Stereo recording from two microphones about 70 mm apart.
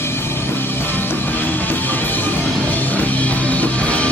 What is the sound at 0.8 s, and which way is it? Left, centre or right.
Music, left.